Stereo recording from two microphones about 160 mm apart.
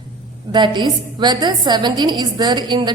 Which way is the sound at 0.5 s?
30° right (ahead or behind).